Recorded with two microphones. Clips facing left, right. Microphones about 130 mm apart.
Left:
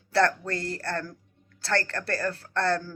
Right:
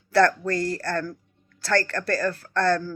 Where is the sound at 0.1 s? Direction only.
25° left (ahead or behind).